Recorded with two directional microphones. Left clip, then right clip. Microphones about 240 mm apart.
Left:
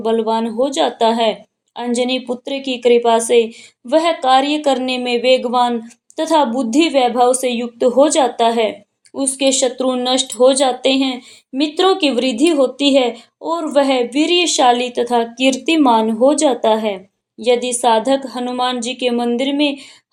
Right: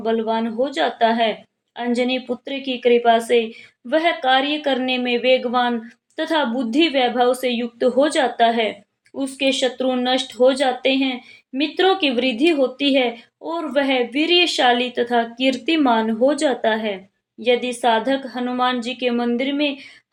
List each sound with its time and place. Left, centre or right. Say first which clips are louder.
0.0 s speech: left 4 dB; left